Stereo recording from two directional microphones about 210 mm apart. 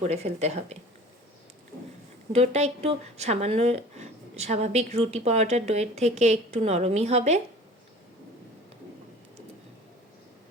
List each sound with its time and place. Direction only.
0.0 s speech: 30° right (ahead or behind)
2.3 s speech: 30° right (ahead or behind)